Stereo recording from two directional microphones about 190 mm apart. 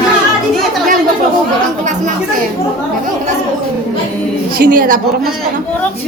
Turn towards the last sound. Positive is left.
turn(degrees=-45)  # may be behind; listen again after turning